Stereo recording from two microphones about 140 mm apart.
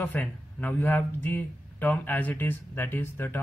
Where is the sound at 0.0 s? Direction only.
10° left (ahead or behind).